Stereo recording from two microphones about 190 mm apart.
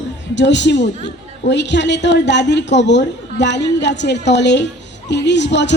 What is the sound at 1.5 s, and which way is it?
A woman's voice, 65° left (ahead or behind).